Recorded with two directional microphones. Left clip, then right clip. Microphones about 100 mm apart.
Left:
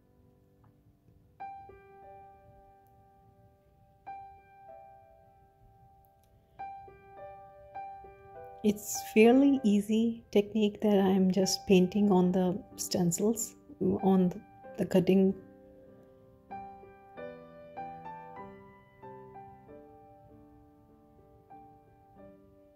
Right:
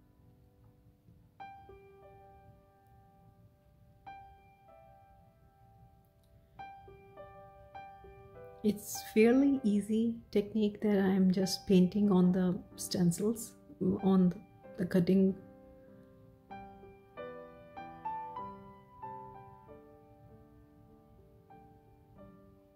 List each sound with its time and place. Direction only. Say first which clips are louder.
8.8 s speech: left 4 dB; 25° left (ahead or behind)
16.4 s music: left 5 dB; 10° right (ahead or behind)
18.5 s music: right 2 dB; 10° right (ahead or behind)